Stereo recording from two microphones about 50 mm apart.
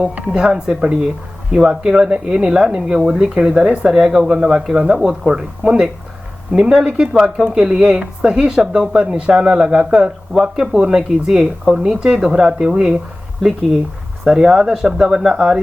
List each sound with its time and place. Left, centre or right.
0.3 s speech: centre
11.9 s speech: centre
14.3 s speech: centre